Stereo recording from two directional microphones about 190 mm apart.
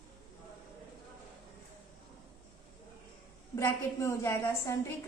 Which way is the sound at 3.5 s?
15° left (ahead or behind).